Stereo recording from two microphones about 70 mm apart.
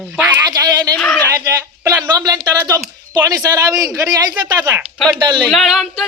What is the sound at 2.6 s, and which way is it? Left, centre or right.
A man's voice, right.